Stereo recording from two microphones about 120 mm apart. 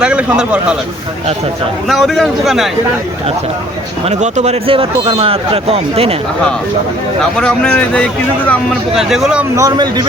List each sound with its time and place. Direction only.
0.0 s speech: 10° right (ahead or behind)
1.9 s speech: centre (ahead or behind)
4.1 s a man's voice: 75° right (ahead or behind)
4.6 s a man's voice: 50° right (ahead or behind)
7.2 s speech: 5° left (ahead or behind)
9.0 s speech: centre (ahead or behind)
9.6 s speech: 35° right (ahead or behind)